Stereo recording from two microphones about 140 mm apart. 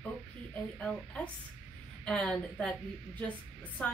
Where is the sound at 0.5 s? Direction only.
10° left (ahead or behind).